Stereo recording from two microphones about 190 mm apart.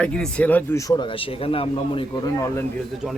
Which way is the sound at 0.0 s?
5° left (ahead or behind).